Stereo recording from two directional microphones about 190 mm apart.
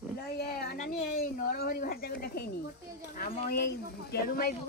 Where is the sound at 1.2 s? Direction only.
55° left (ahead or behind).